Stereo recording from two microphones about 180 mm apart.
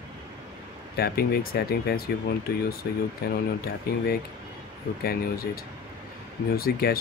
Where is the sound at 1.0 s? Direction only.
60° left (ahead or behind).